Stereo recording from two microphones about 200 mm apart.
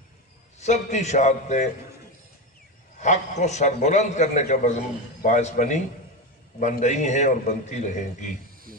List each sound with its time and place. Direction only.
0.6 s a man's voice: 35° left (ahead or behind)
3.0 s a man's voice: 35° left (ahead or behind)